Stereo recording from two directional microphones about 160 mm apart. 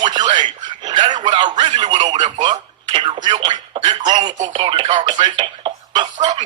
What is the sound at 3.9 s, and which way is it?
Speech, 45° right (ahead or behind).